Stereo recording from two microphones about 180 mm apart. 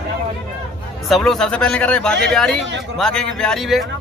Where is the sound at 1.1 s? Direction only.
Centre (ahead or behind).